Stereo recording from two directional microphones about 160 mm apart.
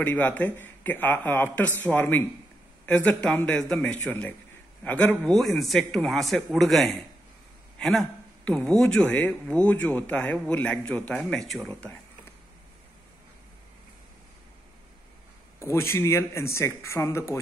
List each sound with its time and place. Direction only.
0.0 s a man's voice: 10° left (ahead or behind)
15.6 s speech: 15° left (ahead or behind)